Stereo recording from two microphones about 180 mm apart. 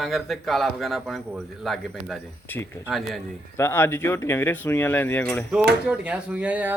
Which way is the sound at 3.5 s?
15° left (ahead or behind).